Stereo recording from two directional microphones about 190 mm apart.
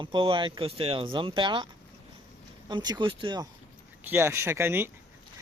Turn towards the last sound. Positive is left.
turn(degrees=-10)  # may be behind; listen again after turning